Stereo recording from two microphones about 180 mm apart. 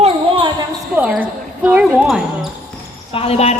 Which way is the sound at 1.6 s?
10° right (ahead or behind).